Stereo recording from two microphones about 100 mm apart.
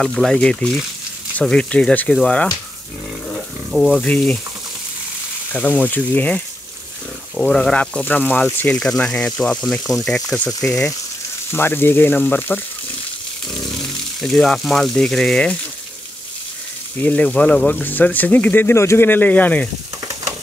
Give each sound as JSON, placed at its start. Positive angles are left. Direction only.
{"t": 0.0, "sound": "speech", "side_deg": 0}
{"t": 3.7, "sound": "speech", "side_deg": -5}
{"t": 4.0, "sound": "speech", "side_deg": 10}
{"t": 5.5, "sound": "speech", "side_deg": 15}
{"t": 7.4, "sound": "speech", "side_deg": 10}
{"t": 11.5, "sound": "speech", "side_deg": 20}
{"t": 13.7, "sound": "speech", "side_deg": 5}
{"t": 17.0, "sound": "speech", "side_deg": 15}